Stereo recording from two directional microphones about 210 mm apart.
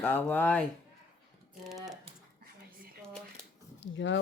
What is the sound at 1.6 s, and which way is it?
Speech, centre (ahead or behind).